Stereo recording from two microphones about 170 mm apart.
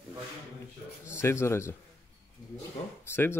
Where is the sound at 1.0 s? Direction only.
15° left (ahead or behind).